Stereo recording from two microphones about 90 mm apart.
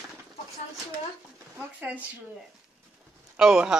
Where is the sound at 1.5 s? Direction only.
20° right (ahead or behind).